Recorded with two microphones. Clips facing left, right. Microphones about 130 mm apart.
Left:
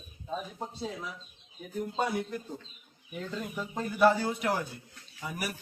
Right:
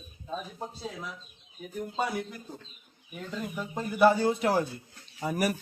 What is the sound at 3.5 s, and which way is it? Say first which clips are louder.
Speech: right 2 dB; 5° right (ahead or behind).